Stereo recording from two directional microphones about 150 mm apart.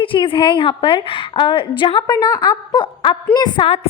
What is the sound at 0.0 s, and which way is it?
A woman's voice, 35° left (ahead or behind).